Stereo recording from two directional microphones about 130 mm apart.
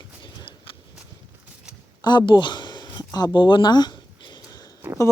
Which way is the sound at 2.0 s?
35° left (ahead or behind).